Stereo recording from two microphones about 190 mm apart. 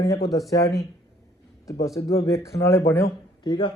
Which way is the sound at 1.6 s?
15° left (ahead or behind).